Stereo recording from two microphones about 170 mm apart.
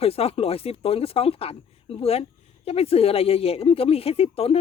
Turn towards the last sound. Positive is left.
turn(degrees=35)  # may be behind; listen again after turning